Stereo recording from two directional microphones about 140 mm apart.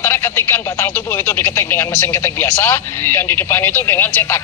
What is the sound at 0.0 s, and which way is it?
Speech, 15° left (ahead or behind).